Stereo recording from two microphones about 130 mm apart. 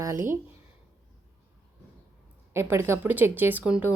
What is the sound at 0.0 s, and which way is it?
Speech, 20° right (ahead or behind).